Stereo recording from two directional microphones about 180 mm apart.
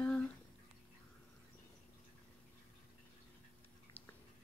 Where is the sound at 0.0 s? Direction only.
10° left (ahead or behind).